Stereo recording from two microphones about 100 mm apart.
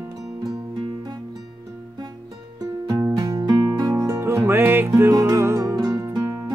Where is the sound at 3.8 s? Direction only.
25° right (ahead or behind).